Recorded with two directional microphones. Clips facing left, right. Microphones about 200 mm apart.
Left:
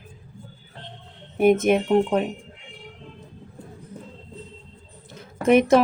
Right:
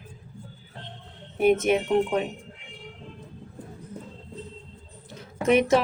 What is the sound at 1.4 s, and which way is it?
Speech, 50° left (ahead or behind).